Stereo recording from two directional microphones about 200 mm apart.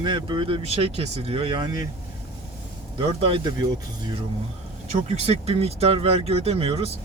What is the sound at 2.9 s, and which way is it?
Speech, 25° right (ahead or behind).